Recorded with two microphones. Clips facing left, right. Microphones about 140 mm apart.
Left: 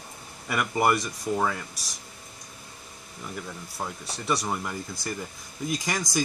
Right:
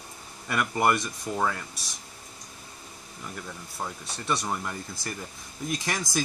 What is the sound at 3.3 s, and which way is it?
Speech, 5° left (ahead or behind).